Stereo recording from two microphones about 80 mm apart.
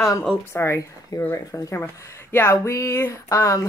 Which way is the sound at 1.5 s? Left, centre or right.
Left.